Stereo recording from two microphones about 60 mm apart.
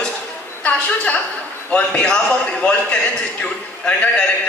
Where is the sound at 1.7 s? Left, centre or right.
Centre.